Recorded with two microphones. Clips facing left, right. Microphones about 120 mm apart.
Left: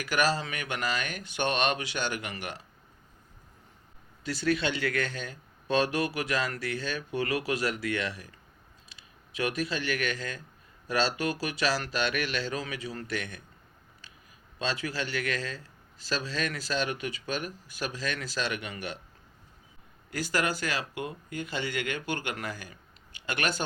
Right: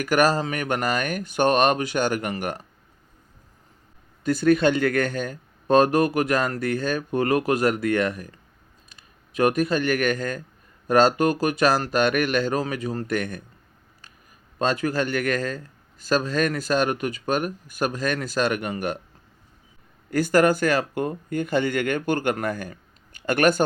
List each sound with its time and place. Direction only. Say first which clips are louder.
0.0 s a man's voice: right 8 dB; 45° right (ahead or behind)
4.2 s a man's voice: right 10 dB; 50° right (ahead or behind)
14.6 s a man's voice: right 9 dB; 50° right (ahead or behind)
20.1 s a man's voice: right 11 dB; 50° right (ahead or behind)